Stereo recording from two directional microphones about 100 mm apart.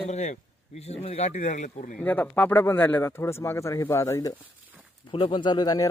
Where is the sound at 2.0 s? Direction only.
15° left (ahead or behind); by 4.4 s 35° left (ahead or behind).